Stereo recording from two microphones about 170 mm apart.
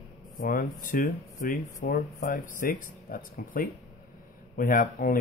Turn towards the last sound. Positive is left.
turn(degrees=50)  # may be behind; listen again after turning